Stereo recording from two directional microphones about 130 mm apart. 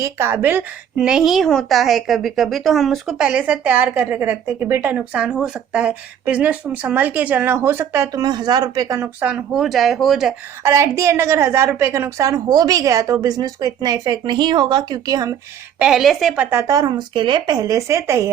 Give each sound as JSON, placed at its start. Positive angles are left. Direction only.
{"t": 0.0, "sound": "a woman's voice", "side_deg": -20}
{"t": 9.2, "sound": "speech", "side_deg": -5}
{"t": 10.6, "sound": "a woman's voice", "side_deg": -20}
{"t": 15.8, "sound": "speech", "side_deg": -5}
{"t": 16.5, "sound": "a woman's voice", "side_deg": -25}